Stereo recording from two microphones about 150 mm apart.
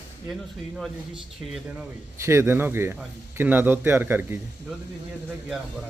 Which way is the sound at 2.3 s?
15° right (ahead or behind).